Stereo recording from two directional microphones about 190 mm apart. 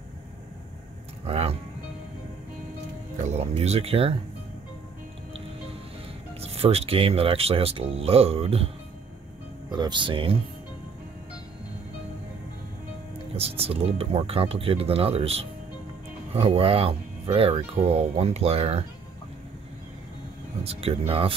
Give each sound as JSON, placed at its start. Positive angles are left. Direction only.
{"t": 1.2, "sound": "a sound", "side_deg": -30}
{"t": 3.3, "sound": "speech", "side_deg": -35}
{"t": 6.4, "sound": "speech", "side_deg": -30}
{"t": 9.7, "sound": "speech", "side_deg": -25}
{"t": 13.4, "sound": "speech", "side_deg": -30}
{"t": 20.6, "sound": "speech", "side_deg": -30}